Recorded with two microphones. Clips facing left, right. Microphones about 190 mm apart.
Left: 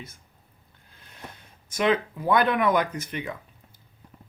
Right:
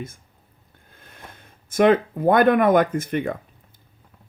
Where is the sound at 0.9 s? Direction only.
50° right (ahead or behind).